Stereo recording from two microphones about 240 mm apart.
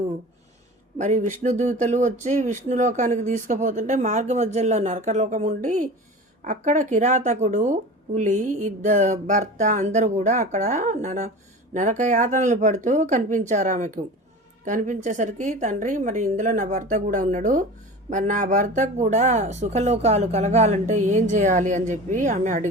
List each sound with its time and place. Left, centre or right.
0.9 s speech: right